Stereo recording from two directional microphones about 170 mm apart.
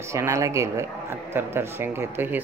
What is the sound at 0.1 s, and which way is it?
A man's voice, 15° right (ahead or behind).